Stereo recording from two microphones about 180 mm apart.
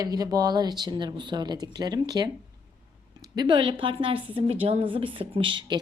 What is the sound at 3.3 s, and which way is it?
Speech, 25° right (ahead or behind).